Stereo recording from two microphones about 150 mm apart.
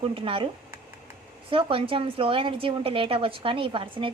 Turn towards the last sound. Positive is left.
turn(degrees=-35)  # may be behind; listen again after turning